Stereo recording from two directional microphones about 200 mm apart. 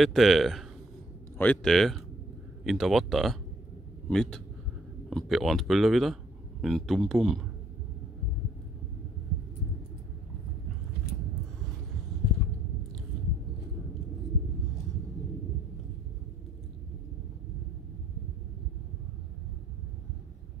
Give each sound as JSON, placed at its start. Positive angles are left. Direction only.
{"t": 0.0, "sound": "speech", "side_deg": 0}